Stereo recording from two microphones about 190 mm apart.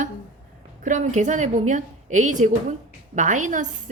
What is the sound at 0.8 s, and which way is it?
A woman's voice, 40° right (ahead or behind).